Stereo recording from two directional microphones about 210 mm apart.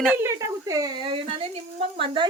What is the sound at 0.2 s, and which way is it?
A woman's voice, 15° right (ahead or behind).